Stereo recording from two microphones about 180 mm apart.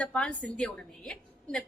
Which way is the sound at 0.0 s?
5° left (ahead or behind).